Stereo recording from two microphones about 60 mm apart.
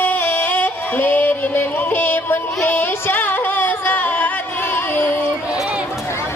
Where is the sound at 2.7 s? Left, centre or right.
Left.